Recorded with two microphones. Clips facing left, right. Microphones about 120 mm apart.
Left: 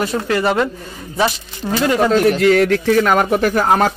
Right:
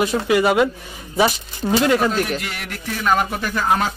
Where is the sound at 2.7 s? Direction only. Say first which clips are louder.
Left 8 dB; 75° left (ahead or behind).